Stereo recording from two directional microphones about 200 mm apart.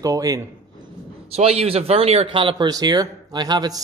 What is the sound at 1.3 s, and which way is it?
A man's voice, 30° right (ahead or behind).